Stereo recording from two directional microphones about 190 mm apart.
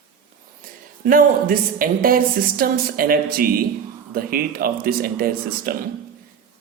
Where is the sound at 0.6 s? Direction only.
50° right (ahead or behind).